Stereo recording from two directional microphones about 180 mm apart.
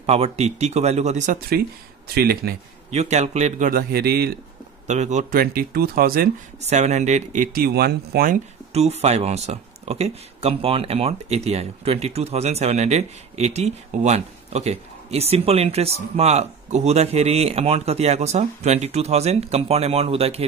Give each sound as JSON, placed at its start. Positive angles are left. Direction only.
{"t": 0.0, "sound": "speech", "side_deg": -35}
{"t": 2.1, "sound": "speech", "side_deg": -60}
{"t": 2.9, "sound": "speech", "side_deg": -40}
{"t": 4.8, "sound": "speech", "side_deg": -40}
{"t": 6.6, "sound": "speech", "side_deg": -40}
{"t": 8.7, "sound": "speech", "side_deg": -35}